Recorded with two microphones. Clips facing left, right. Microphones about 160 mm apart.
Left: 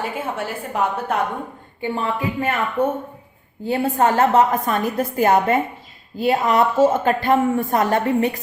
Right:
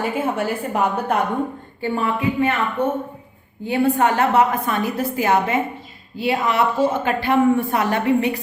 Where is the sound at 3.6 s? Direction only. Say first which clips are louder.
Right 1 dB; 40° left (ahead or behind).